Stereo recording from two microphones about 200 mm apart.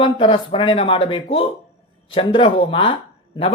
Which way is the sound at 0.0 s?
25° left (ahead or behind).